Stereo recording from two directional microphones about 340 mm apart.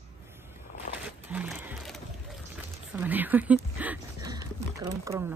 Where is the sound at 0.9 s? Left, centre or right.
Centre.